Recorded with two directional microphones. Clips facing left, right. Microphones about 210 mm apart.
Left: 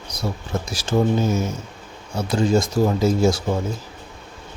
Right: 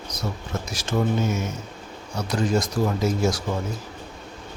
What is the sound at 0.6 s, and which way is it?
A man's voice, 30° left (ahead or behind).